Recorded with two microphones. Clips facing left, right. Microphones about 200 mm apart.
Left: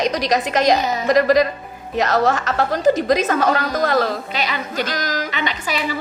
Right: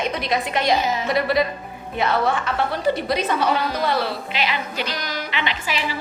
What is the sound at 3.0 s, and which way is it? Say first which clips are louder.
Speech: left 6 dB; 90° left.